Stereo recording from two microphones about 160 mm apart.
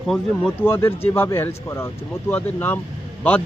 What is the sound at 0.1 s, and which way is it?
Speech, centre (ahead or behind).